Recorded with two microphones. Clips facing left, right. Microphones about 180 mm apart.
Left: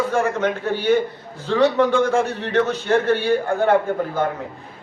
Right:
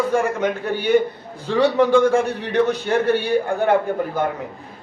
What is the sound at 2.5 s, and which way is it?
A man's voice, 15° right (ahead or behind).